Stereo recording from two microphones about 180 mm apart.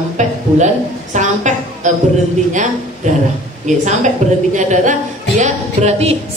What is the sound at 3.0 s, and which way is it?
A woman's voice, 45° right (ahead or behind).